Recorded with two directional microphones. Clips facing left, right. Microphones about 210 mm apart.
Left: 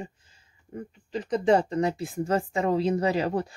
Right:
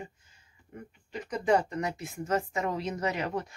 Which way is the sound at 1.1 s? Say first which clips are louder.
Left 5 dB; 30° left (ahead or behind).